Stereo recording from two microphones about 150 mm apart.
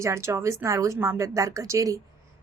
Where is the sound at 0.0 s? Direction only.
20° right (ahead or behind).